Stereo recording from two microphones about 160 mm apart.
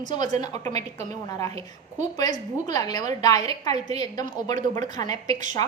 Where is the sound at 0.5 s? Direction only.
45° right (ahead or behind).